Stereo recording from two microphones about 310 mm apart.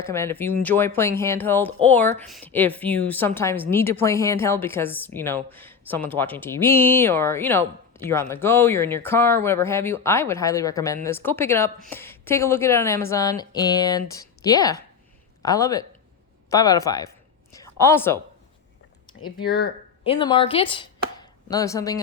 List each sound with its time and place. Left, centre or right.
0.0 s speech: centre
17.5 s a sound: centre
19.5 s speech: left
20.1 s chopping: centre